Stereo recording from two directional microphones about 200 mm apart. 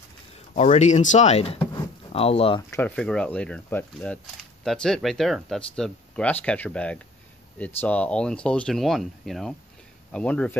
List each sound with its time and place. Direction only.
0.6 s speech: 35° left (ahead or behind)
2.7 s speech: 5° left (ahead or behind)